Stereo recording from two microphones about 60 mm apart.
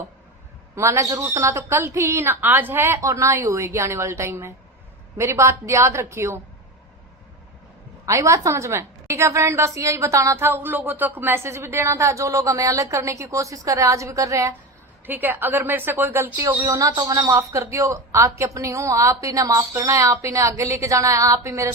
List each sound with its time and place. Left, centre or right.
0.8 s a woman's voice: right
2.4 s a woman's voice: right
8.0 s a woman's voice: right
8.7 s a woman's voice: right
10.3 s a woman's voice: right
15.0 s a woman's voice: right
16.6 s speech: right
17.3 s a woman's voice: right